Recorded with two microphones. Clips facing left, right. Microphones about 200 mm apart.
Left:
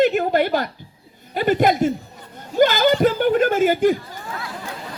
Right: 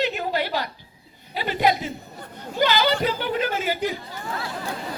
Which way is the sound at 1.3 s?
50° left (ahead or behind).